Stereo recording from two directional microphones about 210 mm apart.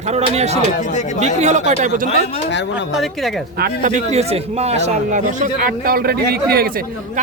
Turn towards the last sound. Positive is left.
turn(degrees=-45)  # may be behind; listen again after turning